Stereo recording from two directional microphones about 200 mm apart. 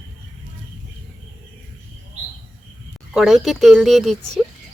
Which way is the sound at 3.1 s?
5° right (ahead or behind).